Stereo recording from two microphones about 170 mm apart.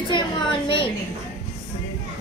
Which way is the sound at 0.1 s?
30° left (ahead or behind).